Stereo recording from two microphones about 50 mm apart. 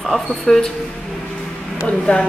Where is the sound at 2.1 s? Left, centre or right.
Left.